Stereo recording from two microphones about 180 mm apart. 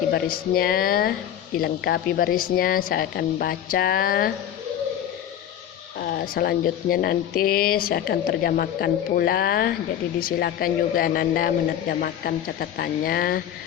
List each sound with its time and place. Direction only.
0.1 s speech: 55° left (ahead or behind)
6.0 s a man's voice: 55° left (ahead or behind)